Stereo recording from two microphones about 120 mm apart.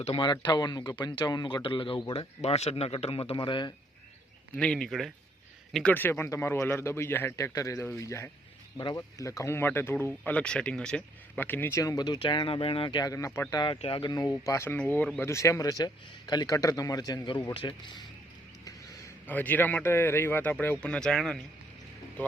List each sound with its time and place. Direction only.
0.2 s a man's voice: 40° left (ahead or behind)
2.1 s speech: 60° left (ahead or behind); by 3.7 s 40° left (ahead or behind)
4.5 s a man's voice: 10° left (ahead or behind)
5.9 s a man's voice: 15° left (ahead or behind)
11.8 s a man's voice: 30° left (ahead or behind)
13.1 s a man's voice: 20° left (ahead or behind)
13.7 s a man's voice: 50° left (ahead or behind); by 14.3 s 35° left (ahead or behind)
14.4 s a man's voice: 25° left (ahead or behind)
19.3 s a man's voice: 15° left (ahead or behind)